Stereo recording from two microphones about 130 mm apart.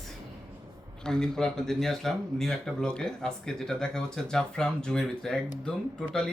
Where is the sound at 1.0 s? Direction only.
5° left (ahead or behind).